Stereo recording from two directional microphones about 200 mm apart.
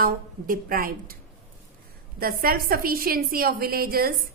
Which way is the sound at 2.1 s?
45° right (ahead or behind).